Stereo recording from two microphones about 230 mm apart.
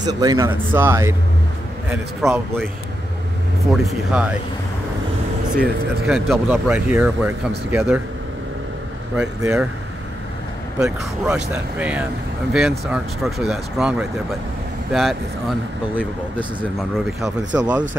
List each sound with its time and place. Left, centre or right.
0.0 s a man's voice: centre
3.7 s speech: centre
5.6 s speech: centre
9.1 s a man's voice: centre
10.8 s a man's voice: centre